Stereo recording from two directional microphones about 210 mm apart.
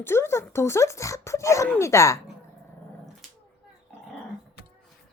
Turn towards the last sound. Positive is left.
turn(degrees=5)  # may be behind; listen again after turning